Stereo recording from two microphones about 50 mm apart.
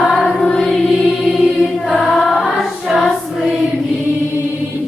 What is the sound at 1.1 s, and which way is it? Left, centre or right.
Music, centre.